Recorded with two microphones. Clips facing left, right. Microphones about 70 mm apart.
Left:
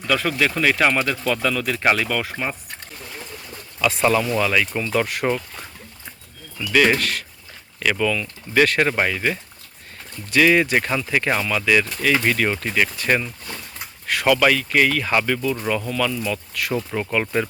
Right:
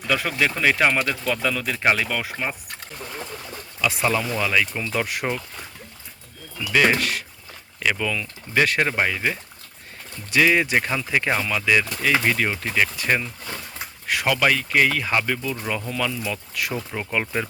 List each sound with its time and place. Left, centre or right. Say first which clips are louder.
0.1 s speech: left 2 dB; centre
3.5 s a sound: left 3 dB; centre
4.4 s speech: left 2 dB; centre
6.6 s speech: left 2 dB; centre
9.1 s speech: left 2 dB; centre
15.1 s speech: left 3 dB; centre
16.9 s speech: left 5 dB; centre